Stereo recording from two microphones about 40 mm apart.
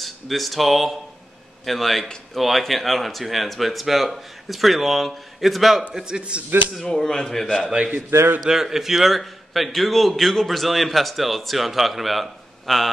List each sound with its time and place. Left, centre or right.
0.0 s speech: centre
5.9 s a man's voice: right
6.8 s a man's voice: centre
8.1 s a man's voice: right
8.5 s speech: centre